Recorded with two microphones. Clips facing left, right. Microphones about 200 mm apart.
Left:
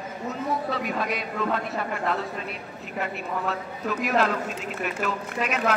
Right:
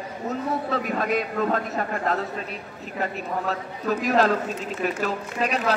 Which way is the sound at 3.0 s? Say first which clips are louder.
Right 2 dB; 40° right (ahead or behind).